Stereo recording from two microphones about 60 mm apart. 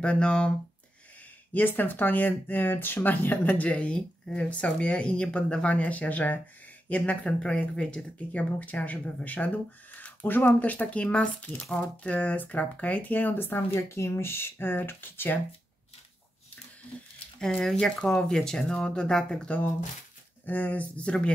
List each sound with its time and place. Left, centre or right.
0.0 s speech: centre
1.5 s speech: left
13.7 s speech: left
17.4 s speech: centre